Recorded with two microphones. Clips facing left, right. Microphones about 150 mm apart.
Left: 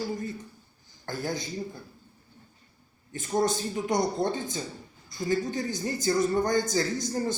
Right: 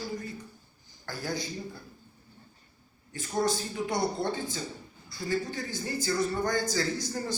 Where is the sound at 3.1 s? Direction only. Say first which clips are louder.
Left 3 dB; 20° left (ahead or behind).